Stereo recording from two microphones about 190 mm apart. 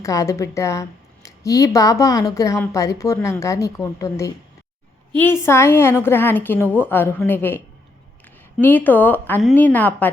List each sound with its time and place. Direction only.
0.0 s speech: 15° left (ahead or behind)
8.6 s speech: 10° left (ahead or behind)